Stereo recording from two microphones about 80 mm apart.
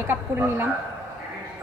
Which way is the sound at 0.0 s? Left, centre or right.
Right.